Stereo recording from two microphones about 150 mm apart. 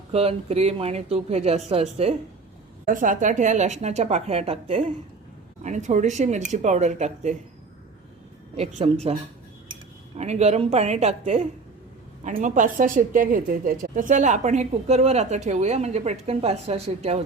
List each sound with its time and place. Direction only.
0.1 s a woman's voice: 40° right (ahead or behind)
2.8 s a woman's voice: 60° right (ahead or behind); by 4.9 s 40° right (ahead or behind)
5.6 s a woman's voice: 55° right (ahead or behind)
8.5 s a woman's voice: 40° right (ahead or behind)
10.2 s a woman's voice: 45° right (ahead or behind)